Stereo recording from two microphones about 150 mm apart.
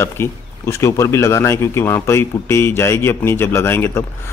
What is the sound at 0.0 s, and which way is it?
Speech, 15° left (ahead or behind).